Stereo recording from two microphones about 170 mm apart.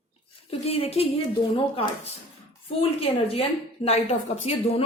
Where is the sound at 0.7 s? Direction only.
35° left (ahead or behind).